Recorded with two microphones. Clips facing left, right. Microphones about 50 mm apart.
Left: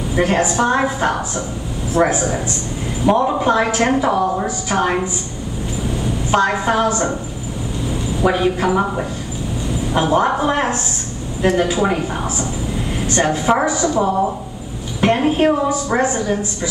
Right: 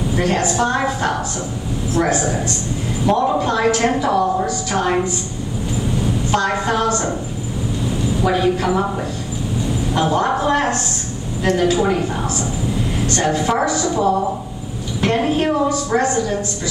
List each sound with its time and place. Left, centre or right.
0.1 s a woman's voice: centre
6.3 s a woman's voice: centre
8.2 s a woman's voice: centre
9.9 s a woman's voice: centre
13.0 s a woman's voice: centre
15.0 s a woman's voice: centre